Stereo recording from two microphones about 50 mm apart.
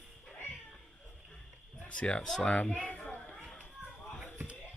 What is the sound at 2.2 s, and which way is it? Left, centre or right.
Speech, centre.